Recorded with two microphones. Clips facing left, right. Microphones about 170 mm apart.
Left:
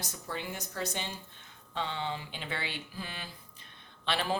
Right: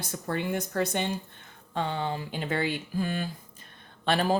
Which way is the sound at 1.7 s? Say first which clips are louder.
Right 5 dB; 45° right (ahead or behind).